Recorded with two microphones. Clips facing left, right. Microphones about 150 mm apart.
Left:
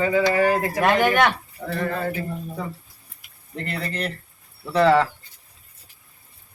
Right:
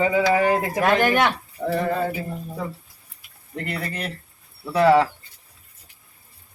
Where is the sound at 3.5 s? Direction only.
10° right (ahead or behind).